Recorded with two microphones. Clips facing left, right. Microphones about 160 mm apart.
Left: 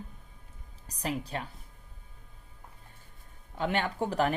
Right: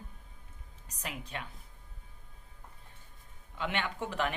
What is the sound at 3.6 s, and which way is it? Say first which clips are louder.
Speech: left 5 dB; 40° left (ahead or behind).